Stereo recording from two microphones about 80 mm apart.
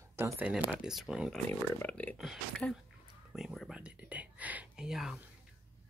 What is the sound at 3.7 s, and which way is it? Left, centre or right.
Whispering, centre.